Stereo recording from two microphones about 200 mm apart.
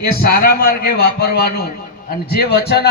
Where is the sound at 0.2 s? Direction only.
50° left (ahead or behind).